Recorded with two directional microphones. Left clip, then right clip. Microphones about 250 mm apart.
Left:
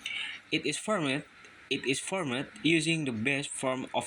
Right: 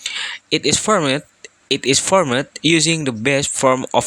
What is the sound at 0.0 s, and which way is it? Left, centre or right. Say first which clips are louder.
Speech: right 11 dB; right.